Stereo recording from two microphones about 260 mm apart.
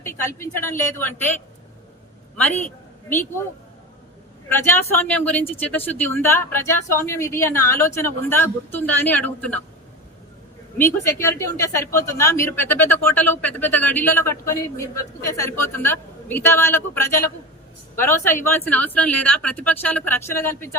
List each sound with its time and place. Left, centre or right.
0.0 s speech: centre
4.6 s speech: centre
10.8 s speech: centre